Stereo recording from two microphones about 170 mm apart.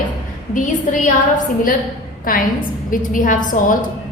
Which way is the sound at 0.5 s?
50° left (ahead or behind).